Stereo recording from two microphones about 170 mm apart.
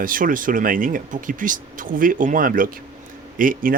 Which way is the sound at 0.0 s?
55° right (ahead or behind).